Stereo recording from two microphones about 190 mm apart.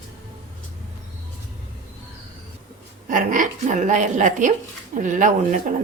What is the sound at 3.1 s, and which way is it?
A woman's voice, 45° right (ahead or behind).